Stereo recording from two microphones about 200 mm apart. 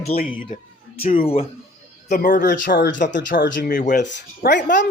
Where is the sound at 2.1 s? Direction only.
40° left (ahead or behind); by 3.6 s 60° left (ahead or behind).